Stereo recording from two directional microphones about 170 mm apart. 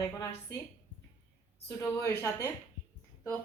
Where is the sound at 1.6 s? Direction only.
15° left (ahead or behind).